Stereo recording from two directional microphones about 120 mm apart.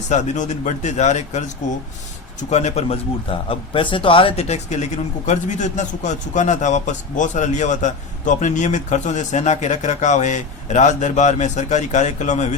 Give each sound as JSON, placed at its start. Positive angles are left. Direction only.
{"t": 0.1, "sound": "speech", "side_deg": 85}
{"t": 4.4, "sound": "a man's voice", "side_deg": 70}